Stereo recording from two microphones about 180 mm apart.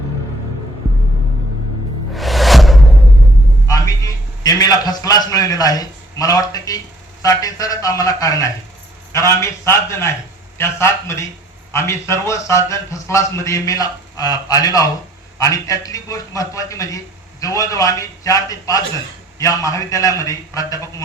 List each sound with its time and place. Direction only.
2.1 s music: centre (ahead or behind)
3.7 s a man's voice: 20° left (ahead or behind)